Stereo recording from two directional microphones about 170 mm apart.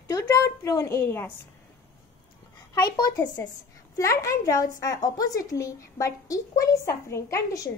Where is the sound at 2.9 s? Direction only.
20° left (ahead or behind).